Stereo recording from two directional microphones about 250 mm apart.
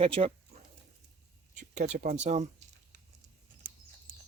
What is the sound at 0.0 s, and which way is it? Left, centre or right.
Speech, right.